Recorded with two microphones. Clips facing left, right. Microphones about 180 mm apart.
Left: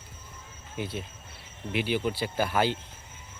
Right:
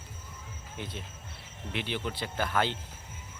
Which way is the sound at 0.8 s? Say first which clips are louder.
Left 7 dB; 10° left (ahead or behind).